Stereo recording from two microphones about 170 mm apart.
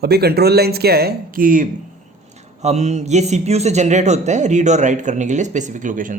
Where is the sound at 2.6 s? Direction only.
40° right (ahead or behind).